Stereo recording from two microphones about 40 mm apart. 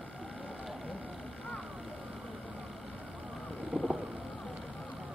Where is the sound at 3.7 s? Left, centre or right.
Right.